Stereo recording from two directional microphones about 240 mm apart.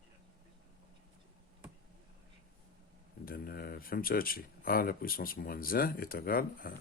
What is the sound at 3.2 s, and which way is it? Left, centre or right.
Speech, left.